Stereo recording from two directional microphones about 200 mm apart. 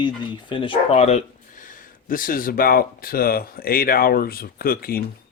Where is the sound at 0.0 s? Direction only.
25° left (ahead or behind); by 5.0 s 50° left (ahead or behind).